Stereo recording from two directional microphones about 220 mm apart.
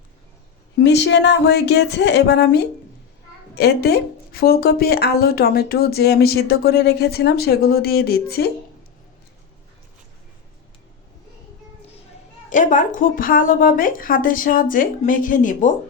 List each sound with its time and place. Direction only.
0.8 s speech: 50° left (ahead or behind)
12.5 s speech: 35° left (ahead or behind)